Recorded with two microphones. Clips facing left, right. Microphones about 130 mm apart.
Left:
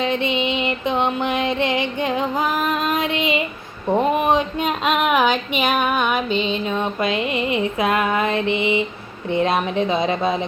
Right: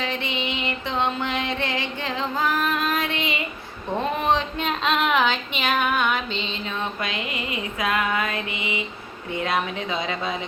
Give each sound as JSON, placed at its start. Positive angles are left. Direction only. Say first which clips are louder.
{"t": 0.0, "sound": "music", "louder": "left 7 dB", "side_deg": 20}
{"t": 3.9, "sound": "a sound", "louder": "left 5 dB", "side_deg": 15}
{"t": 9.4, "sound": "speech", "louder": "left 6 dB", "side_deg": 25}